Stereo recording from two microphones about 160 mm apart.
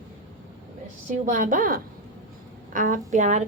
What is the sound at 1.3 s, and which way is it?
A woman's voice, 55° right (ahead or behind).